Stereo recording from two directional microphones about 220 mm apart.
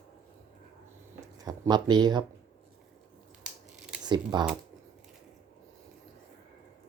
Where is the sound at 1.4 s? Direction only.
15° right (ahead or behind).